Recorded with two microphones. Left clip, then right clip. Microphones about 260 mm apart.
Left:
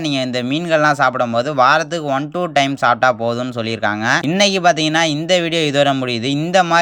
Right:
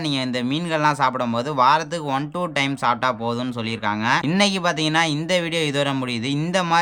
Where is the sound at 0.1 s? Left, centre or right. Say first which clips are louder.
Left 5 dB; centre.